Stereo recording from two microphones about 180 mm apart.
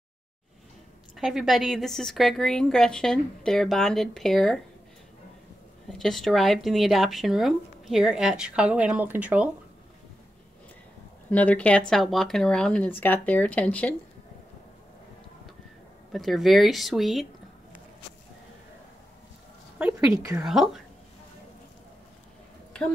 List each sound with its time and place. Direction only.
1.1 s speech: centre (ahead or behind)
5.9 s speech: centre (ahead or behind)
11.2 s speech: 10° left (ahead or behind)
16.1 s speech: centre (ahead or behind)
19.8 s a woman's voice: 15° right (ahead or behind)
20.4 s speech: centre (ahead or behind)
22.7 s a sound: 5° left (ahead or behind)